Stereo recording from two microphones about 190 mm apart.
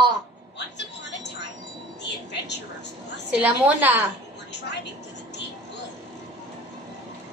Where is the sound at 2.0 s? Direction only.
65° left (ahead or behind).